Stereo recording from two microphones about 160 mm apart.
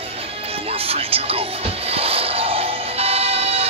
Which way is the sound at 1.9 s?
35° right (ahead or behind).